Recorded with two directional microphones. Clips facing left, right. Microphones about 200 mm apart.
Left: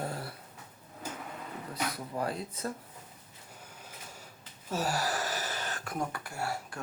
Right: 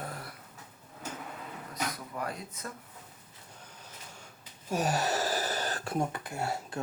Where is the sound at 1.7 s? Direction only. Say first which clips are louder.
Left 1 dB; 30° left (ahead or behind).